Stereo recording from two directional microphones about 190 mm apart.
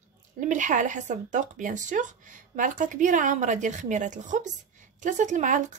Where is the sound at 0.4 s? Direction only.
40° right (ahead or behind).